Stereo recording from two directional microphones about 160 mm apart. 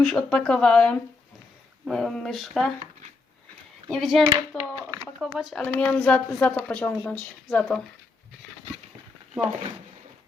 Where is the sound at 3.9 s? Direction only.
Centre (ahead or behind).